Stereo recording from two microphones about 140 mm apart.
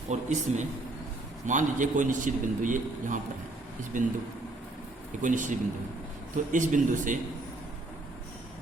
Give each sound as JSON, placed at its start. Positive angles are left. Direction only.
{"t": 0.1, "sound": "a man's voice", "side_deg": -60}
{"t": 5.2, "sound": "a man's voice", "side_deg": -65}